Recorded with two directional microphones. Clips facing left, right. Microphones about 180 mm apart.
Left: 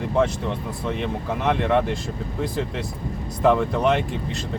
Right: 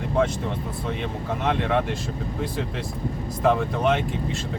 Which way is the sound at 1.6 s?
Centre (ahead or behind).